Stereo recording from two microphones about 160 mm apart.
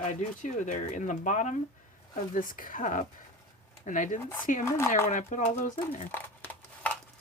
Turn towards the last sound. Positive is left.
turn(degrees=10)  # may be behind; listen again after turning